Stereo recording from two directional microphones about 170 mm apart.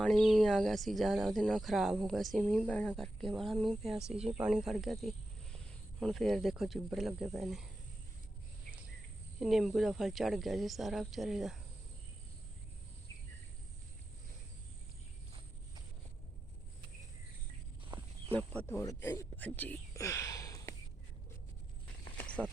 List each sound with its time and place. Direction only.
0.0 s speech: centre (ahead or behind)
9.4 s speech: centre (ahead or behind)
17.9 s a sound: 25° right (ahead or behind)
18.3 s speech: 10° left (ahead or behind)
19.4 s whispering: 10° left (ahead or behind)
22.2 s a sound: 5° left (ahead or behind)